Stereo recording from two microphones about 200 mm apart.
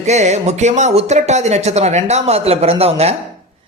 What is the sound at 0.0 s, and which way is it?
A man's voice, 35° right (ahead or behind).